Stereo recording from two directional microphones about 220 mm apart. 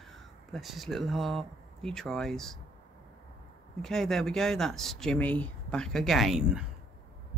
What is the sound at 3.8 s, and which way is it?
Speech, centre (ahead or behind).